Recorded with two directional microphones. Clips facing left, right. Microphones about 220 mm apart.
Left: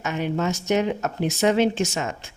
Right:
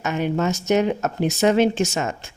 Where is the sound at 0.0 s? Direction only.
50° right (ahead or behind).